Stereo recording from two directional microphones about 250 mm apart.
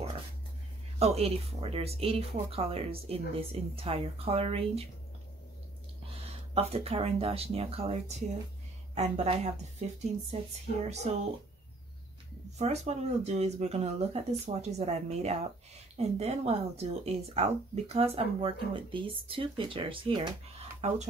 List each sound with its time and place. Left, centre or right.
0.9 s speech: right
6.0 s speech: right
10.7 s speech: left
12.5 s speech: right